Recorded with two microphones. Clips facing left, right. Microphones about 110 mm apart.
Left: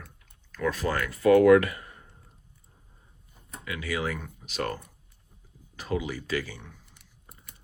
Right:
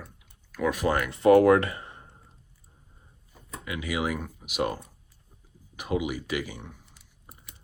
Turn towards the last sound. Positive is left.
turn(degrees=-15)  # may be behind; listen again after turning